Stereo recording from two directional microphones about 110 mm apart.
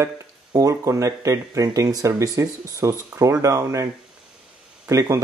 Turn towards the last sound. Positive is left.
turn(degrees=-25)  # may be behind; listen again after turning